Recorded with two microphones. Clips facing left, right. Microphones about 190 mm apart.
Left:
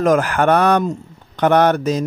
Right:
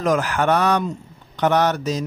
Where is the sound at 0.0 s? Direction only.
55° left (ahead or behind).